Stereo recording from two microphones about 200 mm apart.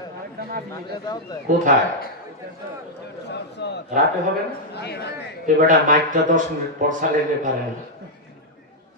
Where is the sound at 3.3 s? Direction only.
55° left (ahead or behind).